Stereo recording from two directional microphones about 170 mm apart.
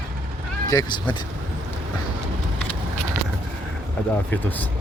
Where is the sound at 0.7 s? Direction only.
20° left (ahead or behind).